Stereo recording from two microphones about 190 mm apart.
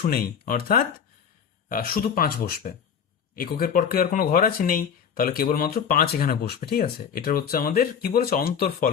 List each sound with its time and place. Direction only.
0.0 s speech: 50° left (ahead or behind)